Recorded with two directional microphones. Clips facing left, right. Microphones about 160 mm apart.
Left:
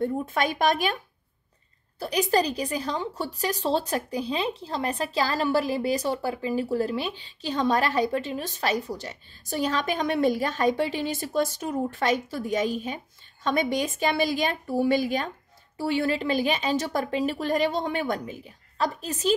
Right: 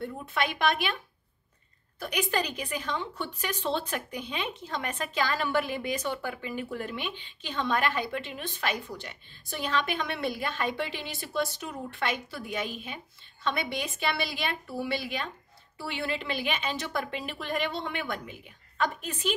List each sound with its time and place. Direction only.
0.0 s speech: 45° left (ahead or behind)
2.0 s a woman's voice: 35° left (ahead or behind)